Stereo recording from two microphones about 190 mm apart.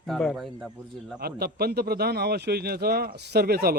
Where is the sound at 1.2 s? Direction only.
55° right (ahead or behind).